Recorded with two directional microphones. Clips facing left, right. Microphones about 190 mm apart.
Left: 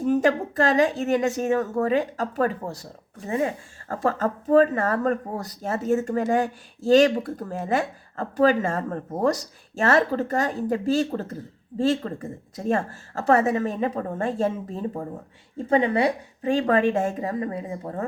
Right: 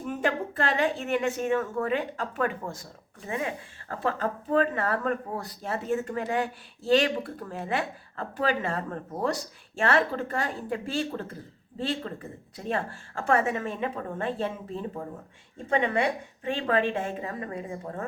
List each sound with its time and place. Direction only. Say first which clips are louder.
0.0 s speech: left 8 dB; 40° left (ahead or behind)